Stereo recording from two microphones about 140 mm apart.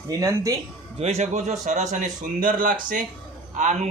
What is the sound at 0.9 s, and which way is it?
A man's voice, 50° right (ahead or behind).